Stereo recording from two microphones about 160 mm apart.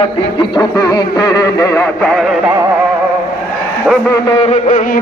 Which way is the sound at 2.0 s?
5° left (ahead or behind).